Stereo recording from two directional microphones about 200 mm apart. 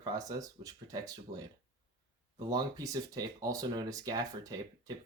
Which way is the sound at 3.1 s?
20° right (ahead or behind).